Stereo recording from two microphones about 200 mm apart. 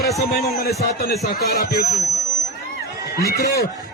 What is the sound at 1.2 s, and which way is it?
Speech, 50° left (ahead or behind).